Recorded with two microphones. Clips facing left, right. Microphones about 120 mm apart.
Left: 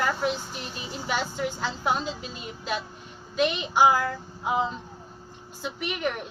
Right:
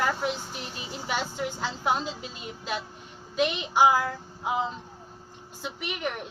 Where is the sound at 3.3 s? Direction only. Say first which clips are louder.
Left 1 dB; 15° right (ahead or behind).